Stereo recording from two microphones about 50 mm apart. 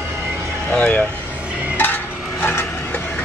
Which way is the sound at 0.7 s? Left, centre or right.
Left.